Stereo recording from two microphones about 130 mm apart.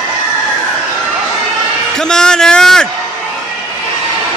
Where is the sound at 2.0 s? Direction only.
5° left (ahead or behind).